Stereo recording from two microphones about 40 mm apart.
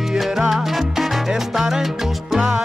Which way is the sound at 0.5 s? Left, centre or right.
Centre.